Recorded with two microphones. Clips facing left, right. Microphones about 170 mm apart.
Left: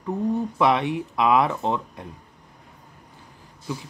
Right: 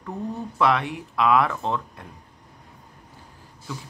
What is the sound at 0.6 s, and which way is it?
Speech, 20° left (ahead or behind).